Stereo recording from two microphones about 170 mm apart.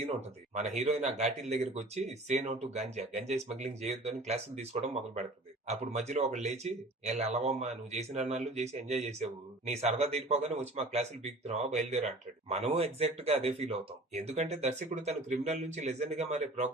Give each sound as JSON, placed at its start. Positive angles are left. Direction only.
{"t": 0.5, "sound": "speech", "side_deg": -40}